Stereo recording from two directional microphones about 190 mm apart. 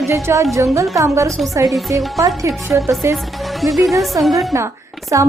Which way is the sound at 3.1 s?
Centre (ahead or behind).